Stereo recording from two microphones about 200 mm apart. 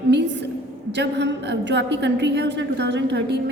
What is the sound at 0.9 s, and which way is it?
A woman's voice, 60° right (ahead or behind).